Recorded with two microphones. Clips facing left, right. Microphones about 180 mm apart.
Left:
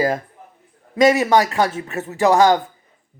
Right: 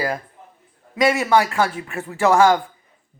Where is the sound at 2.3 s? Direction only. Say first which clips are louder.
Left 1 dB; 35° left (ahead or behind).